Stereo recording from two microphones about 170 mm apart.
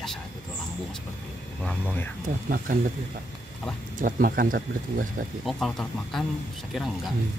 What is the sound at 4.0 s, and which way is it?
Speech, 55° right (ahead or behind).